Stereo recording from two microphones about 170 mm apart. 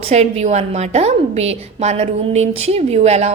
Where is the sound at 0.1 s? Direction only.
40° right (ahead or behind).